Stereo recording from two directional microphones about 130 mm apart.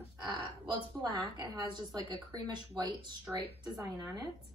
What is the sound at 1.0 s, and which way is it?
A woman's voice, 35° right (ahead or behind).